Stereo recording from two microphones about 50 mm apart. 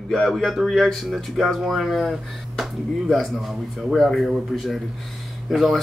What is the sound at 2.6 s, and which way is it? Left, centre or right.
Speech, centre.